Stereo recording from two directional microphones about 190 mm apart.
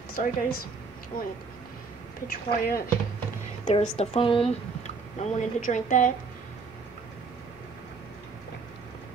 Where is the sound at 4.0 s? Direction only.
30° left (ahead or behind).